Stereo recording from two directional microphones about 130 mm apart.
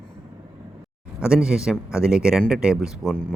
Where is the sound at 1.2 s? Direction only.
5° right (ahead or behind).